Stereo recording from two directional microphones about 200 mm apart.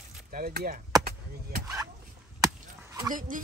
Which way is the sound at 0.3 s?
45° right (ahead or behind).